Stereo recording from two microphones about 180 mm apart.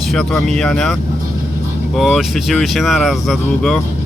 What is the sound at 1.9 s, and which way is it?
Speech, centre (ahead or behind).